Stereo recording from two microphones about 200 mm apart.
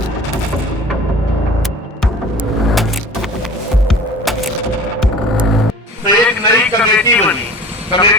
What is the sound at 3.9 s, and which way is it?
Hum, centre (ahead or behind).